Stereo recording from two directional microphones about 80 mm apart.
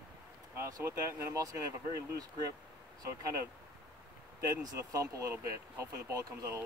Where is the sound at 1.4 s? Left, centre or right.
Right.